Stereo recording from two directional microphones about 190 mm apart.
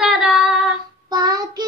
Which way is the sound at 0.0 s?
5° right (ahead or behind).